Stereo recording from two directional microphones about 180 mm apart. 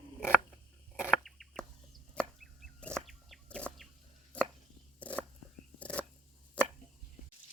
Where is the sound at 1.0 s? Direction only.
5° left (ahead or behind).